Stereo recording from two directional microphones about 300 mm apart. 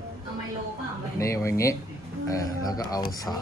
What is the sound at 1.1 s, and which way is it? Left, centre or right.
Speech, centre.